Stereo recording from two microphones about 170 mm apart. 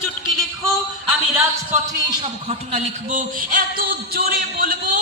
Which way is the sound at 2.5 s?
40° right (ahead or behind).